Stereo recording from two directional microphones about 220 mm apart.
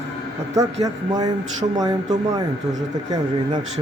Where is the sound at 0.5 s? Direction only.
15° right (ahead or behind).